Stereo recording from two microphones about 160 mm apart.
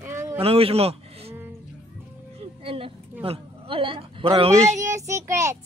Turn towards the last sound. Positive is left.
turn(degrees=-20)  # may be behind; listen again after turning